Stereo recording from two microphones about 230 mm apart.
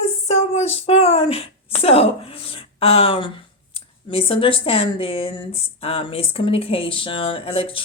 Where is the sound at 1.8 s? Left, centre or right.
Left.